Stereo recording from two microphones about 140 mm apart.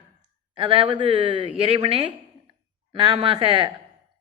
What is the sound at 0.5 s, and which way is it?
A woman's voice, 40° right (ahead or behind).